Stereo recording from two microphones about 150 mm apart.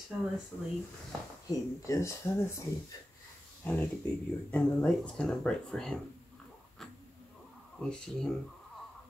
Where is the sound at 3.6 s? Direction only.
10° left (ahead or behind).